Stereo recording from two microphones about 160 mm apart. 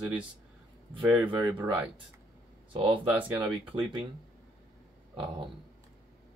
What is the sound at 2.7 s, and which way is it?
Speech, 35° right (ahead or behind).